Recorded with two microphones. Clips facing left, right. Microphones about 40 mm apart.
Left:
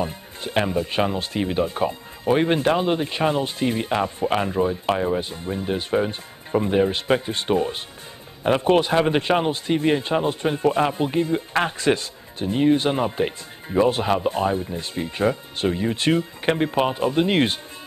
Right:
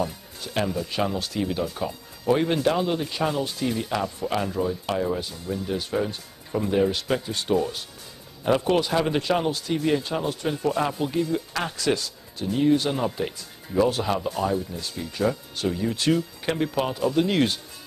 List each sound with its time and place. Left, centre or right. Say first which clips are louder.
0.0 s speech: left 2 dB; left